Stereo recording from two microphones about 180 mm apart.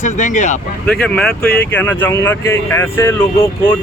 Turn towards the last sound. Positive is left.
turn(degrees=10)  # may be behind; listen again after turning